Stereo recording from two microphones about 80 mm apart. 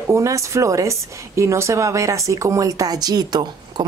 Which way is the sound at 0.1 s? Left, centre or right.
Right.